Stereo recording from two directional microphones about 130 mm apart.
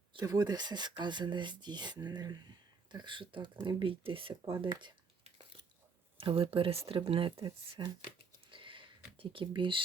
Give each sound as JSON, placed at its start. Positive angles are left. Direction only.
{"t": 0.1, "sound": "speech", "side_deg": -30}
{"t": 6.1, "sound": "speech", "side_deg": -40}
{"t": 7.4, "sound": "speech", "side_deg": -35}
{"t": 8.4, "sound": "a sound", "side_deg": -40}
{"t": 9.1, "sound": "speech", "side_deg": -40}